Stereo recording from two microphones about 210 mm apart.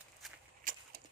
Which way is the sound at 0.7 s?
40° right (ahead or behind).